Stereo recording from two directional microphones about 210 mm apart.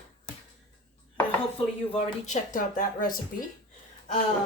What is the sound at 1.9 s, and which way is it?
Speech, 40° left (ahead or behind).